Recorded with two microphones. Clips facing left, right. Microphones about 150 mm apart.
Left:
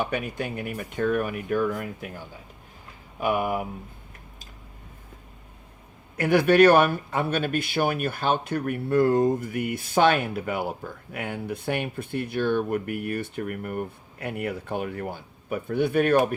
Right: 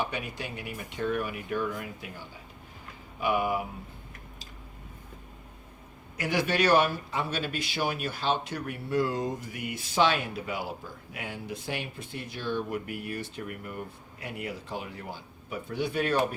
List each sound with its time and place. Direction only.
0.0 s speech: 50° left (ahead or behind)
3.2 s speech: 50° left (ahead or behind)
6.1 s speech: 55° left (ahead or behind)